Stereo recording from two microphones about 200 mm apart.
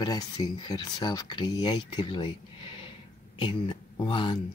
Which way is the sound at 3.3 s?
25° left (ahead or behind).